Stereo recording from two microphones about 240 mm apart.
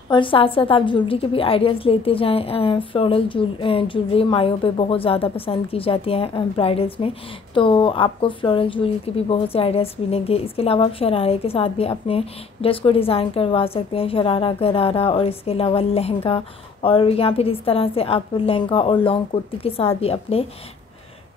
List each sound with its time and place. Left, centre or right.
0.1 s speech: left